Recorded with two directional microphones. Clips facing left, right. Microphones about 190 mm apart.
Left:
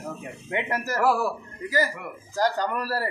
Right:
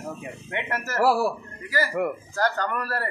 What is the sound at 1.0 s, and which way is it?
Speech, 35° right (ahead or behind).